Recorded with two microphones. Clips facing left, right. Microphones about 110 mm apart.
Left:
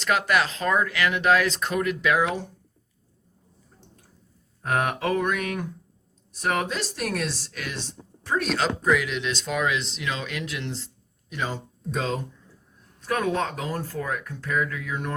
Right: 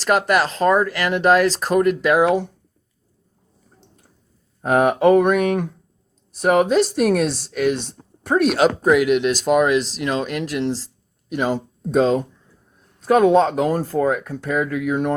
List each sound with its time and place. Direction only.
0.0 s speech: 45° right (ahead or behind)
4.7 s speech: 50° right (ahead or behind)
9.7 s speech: 5° right (ahead or behind)
10.0 s speech: 50° right (ahead or behind)
13.1 s speech: 75° right (ahead or behind)